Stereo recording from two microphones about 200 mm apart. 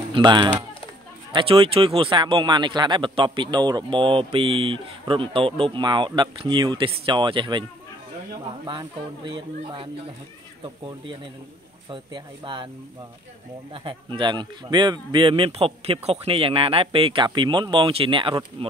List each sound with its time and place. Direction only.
0.1 s speech: 20° right (ahead or behind)
8.6 s speech: 25° right (ahead or behind)
13.8 s speech: 25° right (ahead or behind)